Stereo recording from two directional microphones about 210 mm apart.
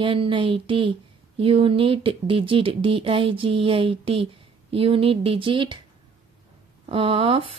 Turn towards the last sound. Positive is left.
turn(degrees=-25)  # may be behind; listen again after turning